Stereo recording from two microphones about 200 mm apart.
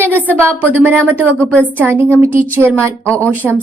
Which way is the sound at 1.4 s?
10° left (ahead or behind).